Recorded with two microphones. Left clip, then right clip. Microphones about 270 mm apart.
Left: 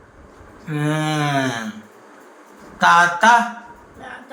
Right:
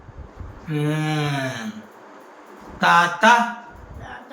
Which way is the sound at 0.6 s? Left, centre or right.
Left.